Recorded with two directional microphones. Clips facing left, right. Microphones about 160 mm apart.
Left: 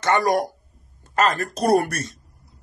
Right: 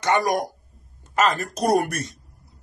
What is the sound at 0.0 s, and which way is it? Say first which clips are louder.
Speech: left 2 dB; 20° right (ahead or behind).